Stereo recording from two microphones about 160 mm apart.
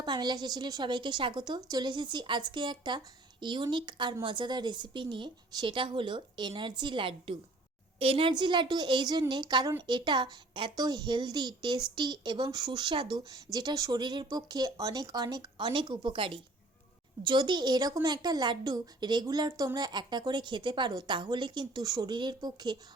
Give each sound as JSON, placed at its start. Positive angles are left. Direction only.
{"t": 0.0, "sound": "a woman's voice", "side_deg": -25}